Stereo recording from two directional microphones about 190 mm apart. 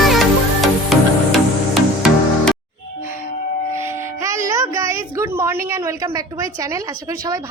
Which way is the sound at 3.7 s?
15° right (ahead or behind).